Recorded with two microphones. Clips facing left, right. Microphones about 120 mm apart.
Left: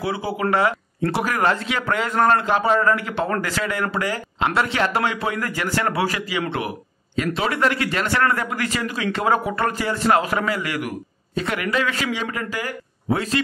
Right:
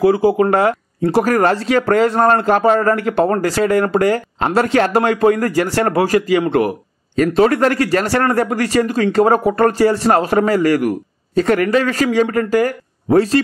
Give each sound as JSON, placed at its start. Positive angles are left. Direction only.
{"t": 0.0, "sound": "speech", "side_deg": -45}